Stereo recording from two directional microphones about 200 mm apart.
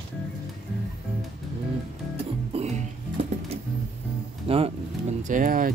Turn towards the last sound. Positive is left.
turn(degrees=-40)  # may be behind; listen again after turning